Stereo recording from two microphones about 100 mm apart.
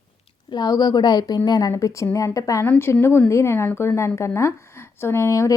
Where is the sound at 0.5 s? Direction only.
40° left (ahead or behind).